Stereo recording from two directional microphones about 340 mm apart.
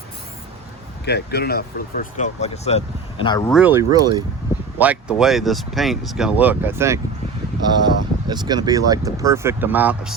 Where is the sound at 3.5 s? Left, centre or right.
Centre.